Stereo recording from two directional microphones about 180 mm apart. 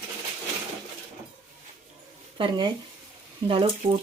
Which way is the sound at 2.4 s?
25° right (ahead or behind).